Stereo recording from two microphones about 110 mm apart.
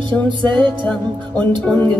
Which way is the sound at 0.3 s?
45° right (ahead or behind).